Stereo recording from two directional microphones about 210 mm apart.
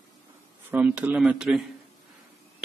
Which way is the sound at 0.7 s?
5° right (ahead or behind).